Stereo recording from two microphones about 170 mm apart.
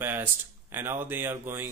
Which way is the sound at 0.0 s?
10° right (ahead or behind).